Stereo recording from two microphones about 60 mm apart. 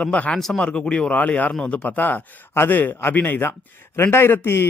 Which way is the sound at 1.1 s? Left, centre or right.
Left.